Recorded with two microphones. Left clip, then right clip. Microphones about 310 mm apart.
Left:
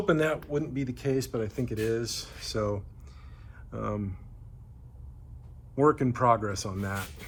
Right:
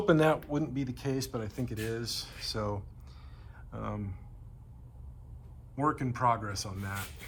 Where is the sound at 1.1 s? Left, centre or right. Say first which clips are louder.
Left 8 dB; centre.